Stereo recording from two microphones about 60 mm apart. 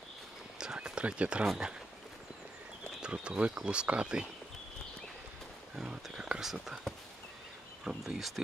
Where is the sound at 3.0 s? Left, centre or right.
Centre.